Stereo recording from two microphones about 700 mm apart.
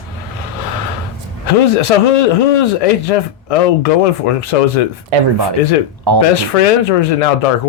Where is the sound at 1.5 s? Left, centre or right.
Left.